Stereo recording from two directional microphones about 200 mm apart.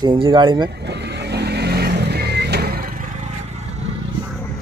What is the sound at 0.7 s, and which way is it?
Vehicle, 55° right (ahead or behind).